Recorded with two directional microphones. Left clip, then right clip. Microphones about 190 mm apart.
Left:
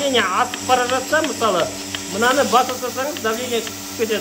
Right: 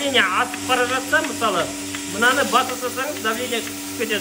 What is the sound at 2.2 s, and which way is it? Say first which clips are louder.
Speech: even; 25° left (ahead or behind).